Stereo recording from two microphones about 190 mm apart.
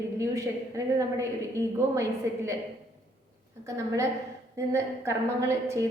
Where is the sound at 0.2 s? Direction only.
15° right (ahead or behind).